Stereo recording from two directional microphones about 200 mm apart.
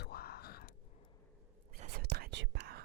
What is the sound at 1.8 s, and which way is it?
Whispering, 50° right (ahead or behind).